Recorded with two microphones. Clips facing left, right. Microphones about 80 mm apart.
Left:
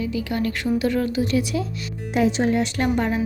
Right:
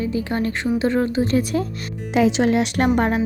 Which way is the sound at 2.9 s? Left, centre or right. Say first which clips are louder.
Right 3 dB; right.